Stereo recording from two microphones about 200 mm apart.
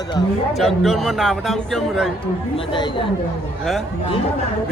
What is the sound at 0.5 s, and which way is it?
A man's voice, centre (ahead or behind).